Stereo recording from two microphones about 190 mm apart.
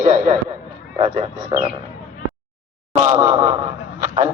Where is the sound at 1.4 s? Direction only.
20° right (ahead or behind).